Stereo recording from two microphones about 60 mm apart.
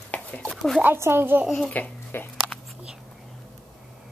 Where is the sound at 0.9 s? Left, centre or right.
Right.